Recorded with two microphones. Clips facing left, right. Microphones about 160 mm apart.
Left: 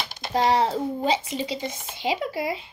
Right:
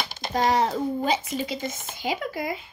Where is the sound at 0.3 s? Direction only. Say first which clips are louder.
Left 1 dB; 30° left (ahead or behind).